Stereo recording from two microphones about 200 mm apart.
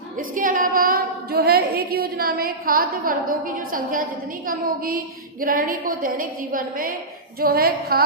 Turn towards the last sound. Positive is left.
turn(degrees=-50)  # may be behind; listen again after turning